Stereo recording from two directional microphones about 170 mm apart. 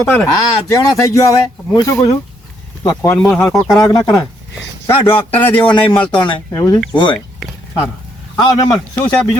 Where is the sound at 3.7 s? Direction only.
15° left (ahead or behind).